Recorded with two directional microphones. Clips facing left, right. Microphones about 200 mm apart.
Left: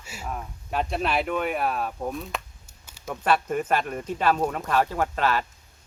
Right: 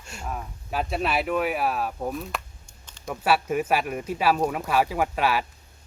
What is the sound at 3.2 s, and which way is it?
Speech, 5° right (ahead or behind).